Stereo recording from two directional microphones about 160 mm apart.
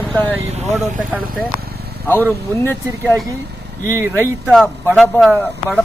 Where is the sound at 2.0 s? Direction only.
10° left (ahead or behind).